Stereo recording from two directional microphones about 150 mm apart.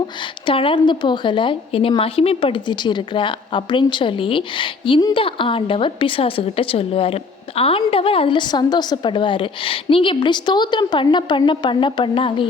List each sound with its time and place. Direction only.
0.2 s a woman's voice: 35° left (ahead or behind)